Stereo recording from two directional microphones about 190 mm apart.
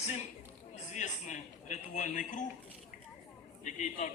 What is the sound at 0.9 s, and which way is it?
A man's voice, 40° left (ahead or behind).